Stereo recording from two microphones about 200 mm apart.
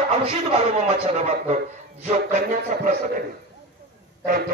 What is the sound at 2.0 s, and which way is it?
Speech, 35° right (ahead or behind).